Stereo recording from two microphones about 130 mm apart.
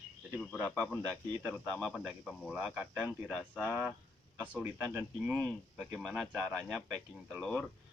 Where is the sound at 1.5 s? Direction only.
5° left (ahead or behind); by 5.4 s 15° right (ahead or behind).